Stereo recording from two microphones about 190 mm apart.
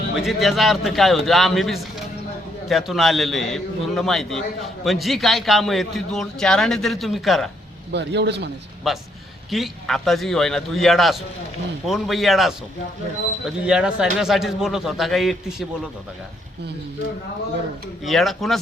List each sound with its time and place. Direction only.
0.2 s a man's voice: centre (ahead or behind)
7.9 s a man's voice: 65° right (ahead or behind)
8.9 s a man's voice: centre (ahead or behind)
18.0 s a man's voice: centre (ahead or behind)